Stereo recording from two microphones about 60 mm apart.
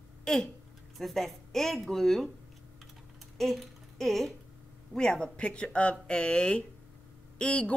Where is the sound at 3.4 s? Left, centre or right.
Centre.